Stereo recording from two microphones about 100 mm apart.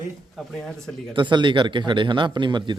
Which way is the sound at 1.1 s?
50° right (ahead or behind).